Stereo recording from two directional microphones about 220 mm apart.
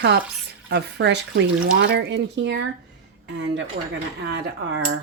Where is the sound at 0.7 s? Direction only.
50° right (ahead or behind).